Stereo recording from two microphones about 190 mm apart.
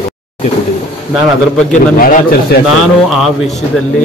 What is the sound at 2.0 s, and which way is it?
Speech, 50° left (ahead or behind).